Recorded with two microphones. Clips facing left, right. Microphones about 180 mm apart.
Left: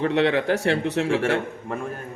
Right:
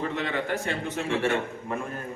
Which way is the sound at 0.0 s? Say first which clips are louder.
Left 9 dB; 75° left (ahead or behind).